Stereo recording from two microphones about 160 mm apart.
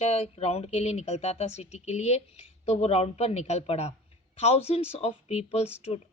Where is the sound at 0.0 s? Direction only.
40° left (ahead or behind).